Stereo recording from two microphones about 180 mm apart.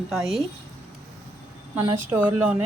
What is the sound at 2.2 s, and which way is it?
Speech, 5° right (ahead or behind).